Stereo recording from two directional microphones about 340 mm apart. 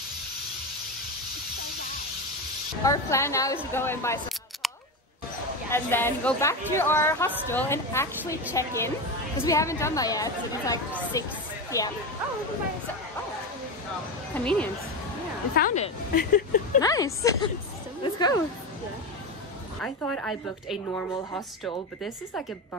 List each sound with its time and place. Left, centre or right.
2.8 s speech: centre
3.7 s scissors: centre
5.7 s speech: centre
14.3 s a woman's voice: centre
15.5 s a woman's voice: left
16.8 s a woman's voice: centre
19.8 s a woman's voice: centre